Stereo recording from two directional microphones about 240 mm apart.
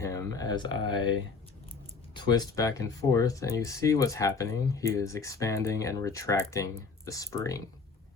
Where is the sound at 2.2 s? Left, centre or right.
Centre.